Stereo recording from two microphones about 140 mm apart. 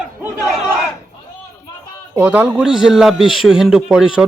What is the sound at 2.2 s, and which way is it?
A man's voice, 10° right (ahead or behind).